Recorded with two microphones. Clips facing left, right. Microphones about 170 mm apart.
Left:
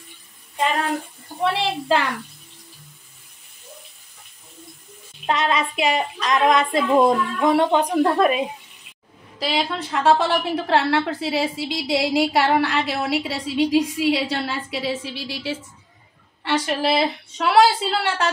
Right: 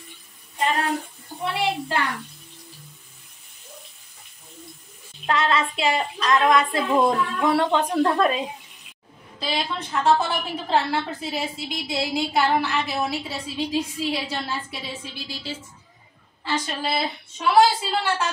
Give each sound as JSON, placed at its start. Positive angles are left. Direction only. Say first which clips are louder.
{"t": 1.4, "sound": "a woman's voice", "louder": "left 3 dB", "side_deg": 90}
{"t": 5.2, "sound": "child singing", "louder": "left 1 dB", "side_deg": 20}
{"t": 9.4, "sound": "a woman's voice", "louder": "left 4 dB", "side_deg": 85}